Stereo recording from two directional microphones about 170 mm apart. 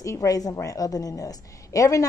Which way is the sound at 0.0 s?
20° left (ahead or behind).